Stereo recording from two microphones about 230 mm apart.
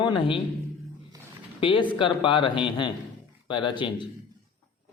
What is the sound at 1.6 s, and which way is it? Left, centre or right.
Speech, left.